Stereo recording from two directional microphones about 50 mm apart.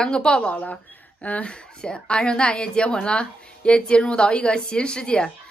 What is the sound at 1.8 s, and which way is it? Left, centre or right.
A woman's voice, centre.